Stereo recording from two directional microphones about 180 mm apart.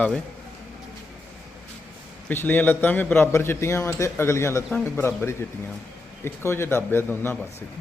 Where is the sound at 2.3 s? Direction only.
10° left (ahead or behind).